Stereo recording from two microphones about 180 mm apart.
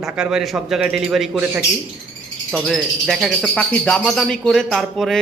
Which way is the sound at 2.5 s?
Centre (ahead or behind).